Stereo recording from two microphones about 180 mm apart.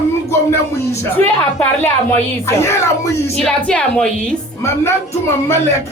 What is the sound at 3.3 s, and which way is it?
A woman's voice, 5° left (ahead or behind).